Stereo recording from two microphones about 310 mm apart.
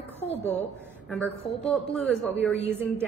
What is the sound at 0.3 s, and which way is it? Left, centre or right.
A man's voice, centre.